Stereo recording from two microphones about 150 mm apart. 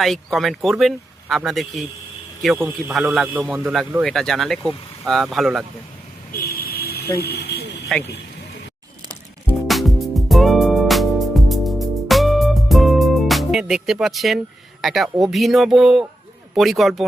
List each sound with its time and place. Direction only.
0.0 s a man's voice: centre (ahead or behind)
3.0 s a man's voice: 5° right (ahead or behind)
3.6 s a man's voice: centre (ahead or behind)
6.6 s vehicle: 90° left
7.2 s speech: 90° left
7.9 s a man's voice: 5° left (ahead or behind)
9.6 s music: centre (ahead or behind)
15.2 s a man's voice: centre (ahead or behind)